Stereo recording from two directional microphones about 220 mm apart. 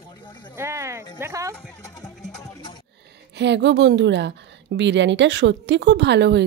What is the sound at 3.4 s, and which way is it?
A woman's voice, 50° right (ahead or behind).